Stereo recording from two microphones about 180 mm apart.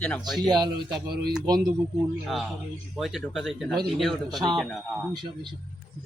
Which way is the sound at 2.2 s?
Centre (ahead or behind).